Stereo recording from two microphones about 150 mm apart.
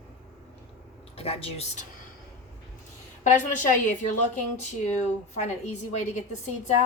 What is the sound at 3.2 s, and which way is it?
A woman's voice, 55° left (ahead or behind).